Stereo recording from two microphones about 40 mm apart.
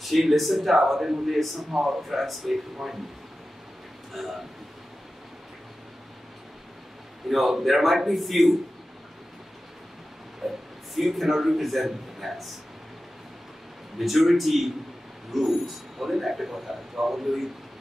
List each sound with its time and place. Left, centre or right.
0.0 s speech: centre
1.7 s speech: centre
2.0 s speech: centre
4.1 s speech: centre
7.2 s speech: centre
10.4 s a sound: centre
11.0 s speech: centre
13.9 s speech: centre